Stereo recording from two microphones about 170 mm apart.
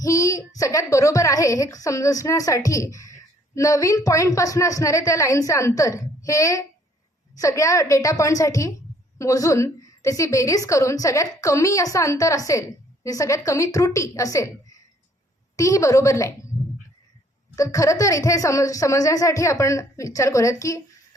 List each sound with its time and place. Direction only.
0.0 s a woman's voice: 20° left (ahead or behind)
17.5 s a woman's voice: 20° left (ahead or behind)